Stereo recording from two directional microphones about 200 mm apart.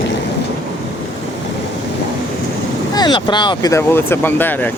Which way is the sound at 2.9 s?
20° left (ahead or behind).